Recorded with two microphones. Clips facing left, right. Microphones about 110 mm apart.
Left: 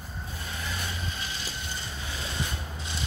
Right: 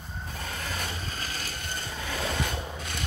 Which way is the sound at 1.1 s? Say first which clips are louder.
Right 1 dB; 45° right (ahead or behind).